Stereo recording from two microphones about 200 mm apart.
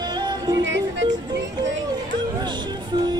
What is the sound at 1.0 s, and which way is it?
Music, 20° right (ahead or behind).